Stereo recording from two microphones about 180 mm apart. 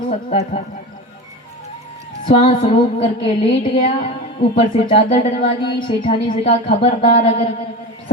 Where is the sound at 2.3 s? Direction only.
30° left (ahead or behind).